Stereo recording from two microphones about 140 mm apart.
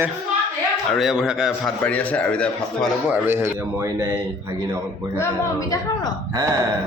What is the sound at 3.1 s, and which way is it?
Speech, 15° right (ahead or behind).